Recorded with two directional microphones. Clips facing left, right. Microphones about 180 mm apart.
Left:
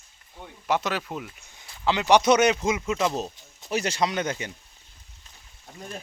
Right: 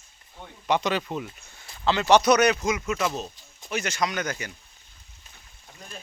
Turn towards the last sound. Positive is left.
turn(degrees=25)  # may be behind; listen again after turning